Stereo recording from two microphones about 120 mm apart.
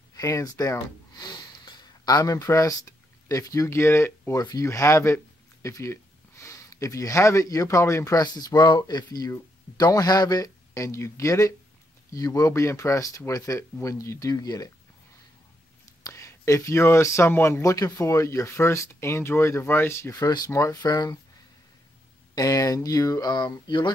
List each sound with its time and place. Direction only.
0.1 s speech: 30° left (ahead or behind)
16.0 s speech: 25° left (ahead or behind)
22.3 s speech: 30° left (ahead or behind)